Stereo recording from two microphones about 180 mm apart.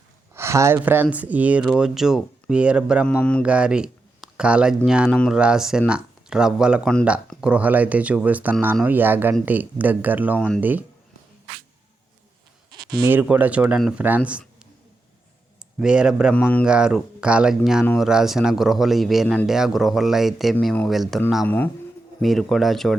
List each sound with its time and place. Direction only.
0.3 s speech: 15° right (ahead or behind)
3.1 s speech: 5° left (ahead or behind)
3.4 s speech: 5° right (ahead or behind)
12.7 s a sound: 60° right (ahead or behind)
13.1 s speech: 10° right (ahead or behind)
15.8 s speech: 5° right (ahead or behind)
16.3 s a man's voice: 10° left (ahead or behind)
16.6 s speech: 5° right (ahead or behind)
21.4 s a man's voice: 10° left (ahead or behind)
22.2 s speech: centre (ahead or behind)